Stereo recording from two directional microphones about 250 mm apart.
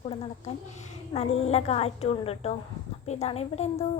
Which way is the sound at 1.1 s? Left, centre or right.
Left.